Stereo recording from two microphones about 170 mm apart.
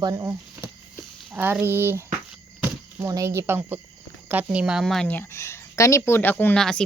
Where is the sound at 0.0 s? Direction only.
15° right (ahead or behind).